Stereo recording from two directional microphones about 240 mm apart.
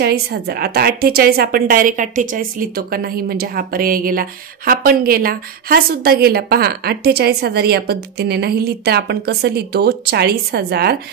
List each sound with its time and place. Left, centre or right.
0.0 s a woman's voice: right